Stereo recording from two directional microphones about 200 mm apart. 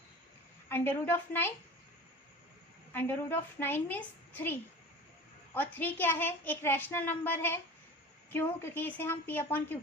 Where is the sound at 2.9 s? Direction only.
10° left (ahead or behind).